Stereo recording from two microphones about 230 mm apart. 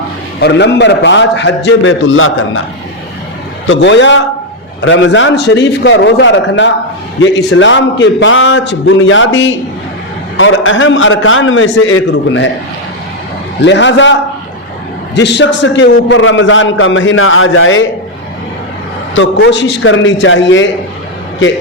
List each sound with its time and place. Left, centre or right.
0.3 s a man's voice: left
3.7 s a man's voice: left
13.6 s a man's voice: left
19.1 s a man's voice: left